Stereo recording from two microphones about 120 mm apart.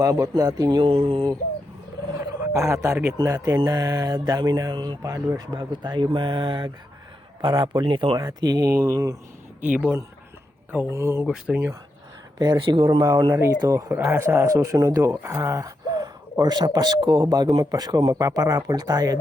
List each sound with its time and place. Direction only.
0.0 s speech: 30° right (ahead or behind)
0.9 s a sound: 50° right (ahead or behind)
2.4 s speech: 25° right (ahead or behind)
9.6 s speech: 15° right (ahead or behind)
11.3 s speech: 10° right (ahead or behind)
12.4 s speech: 40° right (ahead or behind)
13.6 s speech: 30° right (ahead or behind)